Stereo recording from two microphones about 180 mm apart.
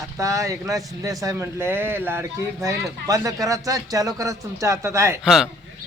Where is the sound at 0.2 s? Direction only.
20° right (ahead or behind).